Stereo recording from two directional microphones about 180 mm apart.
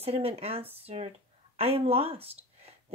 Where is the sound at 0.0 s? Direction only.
35° right (ahead or behind).